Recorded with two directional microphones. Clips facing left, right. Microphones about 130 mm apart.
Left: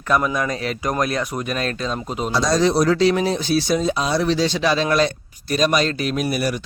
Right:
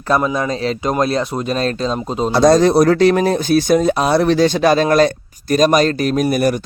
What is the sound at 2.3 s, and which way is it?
Speech, 55° right (ahead or behind).